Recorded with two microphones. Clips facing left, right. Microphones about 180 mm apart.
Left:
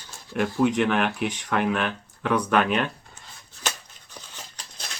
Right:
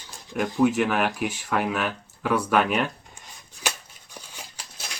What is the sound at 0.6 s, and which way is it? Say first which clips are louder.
Speech: right 1 dB; 5° right (ahead or behind).